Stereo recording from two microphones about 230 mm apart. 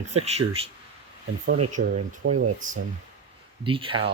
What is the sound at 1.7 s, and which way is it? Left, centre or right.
Speech, right.